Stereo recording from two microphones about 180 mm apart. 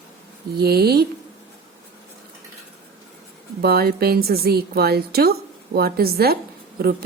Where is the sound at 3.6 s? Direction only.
60° right (ahead or behind).